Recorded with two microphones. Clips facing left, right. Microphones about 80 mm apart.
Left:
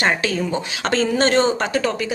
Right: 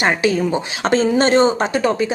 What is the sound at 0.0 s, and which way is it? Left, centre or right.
Speech, centre.